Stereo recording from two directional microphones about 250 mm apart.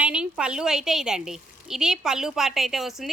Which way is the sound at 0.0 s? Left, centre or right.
Centre.